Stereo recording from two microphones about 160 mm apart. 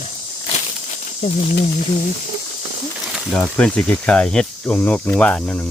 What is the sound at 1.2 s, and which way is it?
Speech, 50° left (ahead or behind).